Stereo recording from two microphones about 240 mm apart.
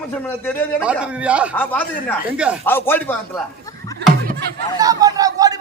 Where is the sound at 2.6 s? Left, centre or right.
Centre.